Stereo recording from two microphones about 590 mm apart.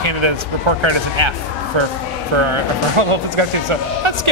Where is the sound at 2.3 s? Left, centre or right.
Right.